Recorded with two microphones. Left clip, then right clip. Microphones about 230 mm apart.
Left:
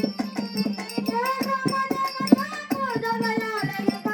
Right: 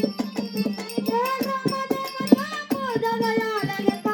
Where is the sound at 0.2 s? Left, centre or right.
Centre.